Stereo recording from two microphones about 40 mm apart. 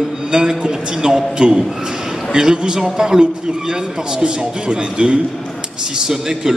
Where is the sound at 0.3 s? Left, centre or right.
Centre.